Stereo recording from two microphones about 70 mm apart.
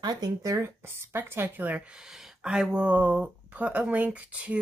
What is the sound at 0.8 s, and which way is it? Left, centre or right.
Speech, right.